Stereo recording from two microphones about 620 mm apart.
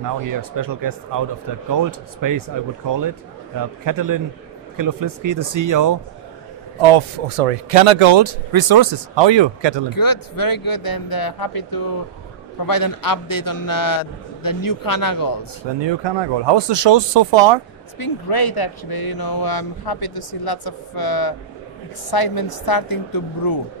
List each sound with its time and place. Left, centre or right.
0.0 s speech: right
6.8 s speech: right
9.8 s speech: left
15.8 s speech: right
17.9 s speech: left